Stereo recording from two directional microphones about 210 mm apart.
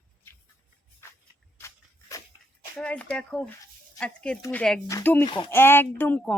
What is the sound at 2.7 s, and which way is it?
Speech, 5° left (ahead or behind).